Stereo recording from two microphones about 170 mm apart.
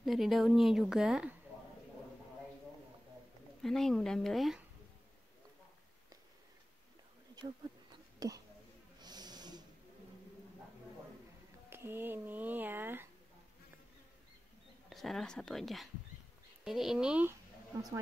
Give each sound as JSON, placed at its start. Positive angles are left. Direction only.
{"t": 0.0, "sound": "a woman's voice", "side_deg": 0}
{"t": 3.6, "sound": "a woman's voice", "side_deg": 0}
{"t": 8.2, "sound": "speech", "side_deg": -20}
{"t": 9.0, "sound": "snort", "side_deg": -25}
{"t": 11.7, "sound": "speech", "side_deg": -15}
{"t": 14.9, "sound": "a woman's voice", "side_deg": 0}